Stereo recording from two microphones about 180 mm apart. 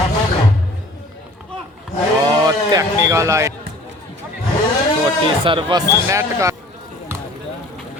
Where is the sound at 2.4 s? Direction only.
20° right (ahead or behind).